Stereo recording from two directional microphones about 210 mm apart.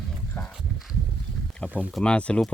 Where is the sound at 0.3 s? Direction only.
Centre (ahead or behind).